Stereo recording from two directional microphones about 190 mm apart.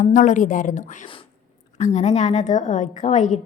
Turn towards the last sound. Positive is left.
turn(degrees=40)  # may be behind; listen again after turning